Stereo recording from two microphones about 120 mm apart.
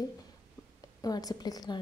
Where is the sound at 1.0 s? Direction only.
30° left (ahead or behind).